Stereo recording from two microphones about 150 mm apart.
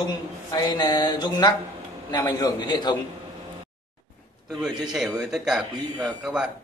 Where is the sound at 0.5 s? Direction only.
30° left (ahead or behind).